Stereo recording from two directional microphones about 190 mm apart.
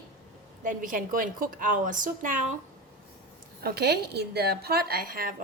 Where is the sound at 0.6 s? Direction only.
45° right (ahead or behind).